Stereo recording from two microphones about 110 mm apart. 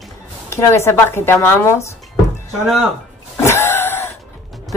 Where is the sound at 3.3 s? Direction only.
20° left (ahead or behind).